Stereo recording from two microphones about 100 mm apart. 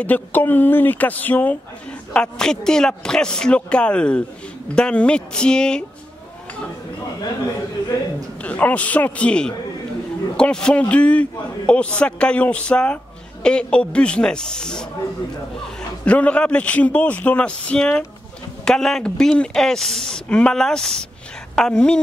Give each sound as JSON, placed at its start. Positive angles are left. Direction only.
{"t": 0.0, "sound": "a man's voice", "side_deg": 15}
{"t": 8.4, "sound": "a man's voice", "side_deg": 15}
{"t": 16.1, "sound": "a man's voice", "side_deg": 15}